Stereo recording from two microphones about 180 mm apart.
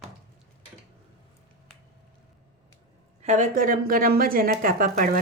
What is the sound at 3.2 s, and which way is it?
A woman's voice, 45° right (ahead or behind).